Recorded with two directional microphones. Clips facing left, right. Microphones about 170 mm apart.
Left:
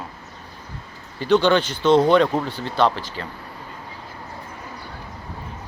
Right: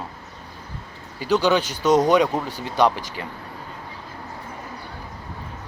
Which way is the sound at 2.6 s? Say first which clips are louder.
Right 2 dB; 15° right (ahead or behind).